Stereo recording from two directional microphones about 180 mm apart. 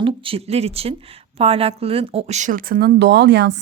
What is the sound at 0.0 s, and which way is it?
Speech, 30° right (ahead or behind).